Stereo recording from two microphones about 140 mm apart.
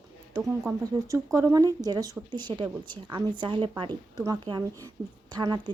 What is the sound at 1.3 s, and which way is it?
Speech, 25° right (ahead or behind).